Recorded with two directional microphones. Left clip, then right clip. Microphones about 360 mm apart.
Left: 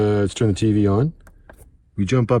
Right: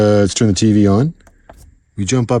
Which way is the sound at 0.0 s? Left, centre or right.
Centre.